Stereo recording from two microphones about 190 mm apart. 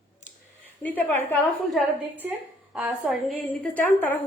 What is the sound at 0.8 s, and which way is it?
Speech, 10° left (ahead or behind).